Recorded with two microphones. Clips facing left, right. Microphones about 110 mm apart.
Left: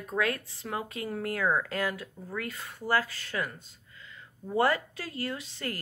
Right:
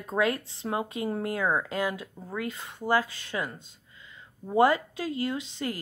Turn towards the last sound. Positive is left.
turn(degrees=-20)  # may be behind; listen again after turning